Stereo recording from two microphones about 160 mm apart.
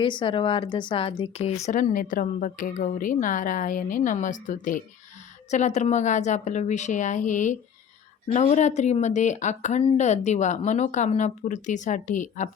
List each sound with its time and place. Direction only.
0.0 s speech: 30° left (ahead or behind)
1.6 s speech: 55° left (ahead or behind)